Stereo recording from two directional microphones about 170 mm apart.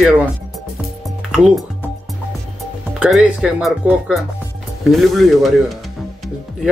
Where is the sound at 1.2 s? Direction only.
5° right (ahead or behind).